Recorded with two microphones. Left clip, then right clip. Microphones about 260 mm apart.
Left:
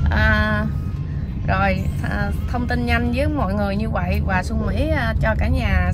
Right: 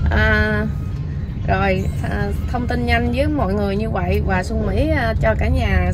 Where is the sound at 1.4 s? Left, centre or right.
Centre.